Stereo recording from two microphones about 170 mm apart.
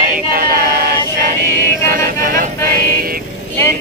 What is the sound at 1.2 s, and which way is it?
Music, 65° right (ahead or behind).